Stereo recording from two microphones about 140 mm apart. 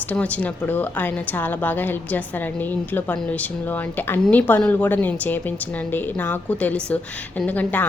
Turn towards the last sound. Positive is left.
turn(degrees=10)  # may be behind; listen again after turning